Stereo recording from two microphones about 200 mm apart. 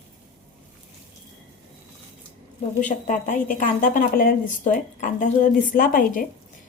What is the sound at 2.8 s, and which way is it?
A woman's voice, 40° left (ahead or behind).